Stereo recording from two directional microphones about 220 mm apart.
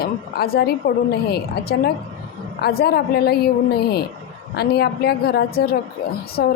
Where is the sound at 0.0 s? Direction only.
45° left (ahead or behind).